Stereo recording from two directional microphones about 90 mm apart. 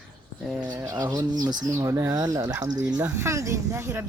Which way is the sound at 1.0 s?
45° right (ahead or behind).